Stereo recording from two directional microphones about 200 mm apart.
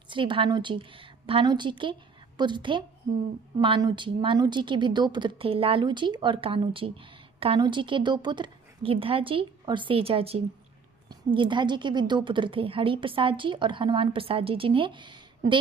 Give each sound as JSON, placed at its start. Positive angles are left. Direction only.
{"t": 0.1, "sound": "a woman's voice", "side_deg": -25}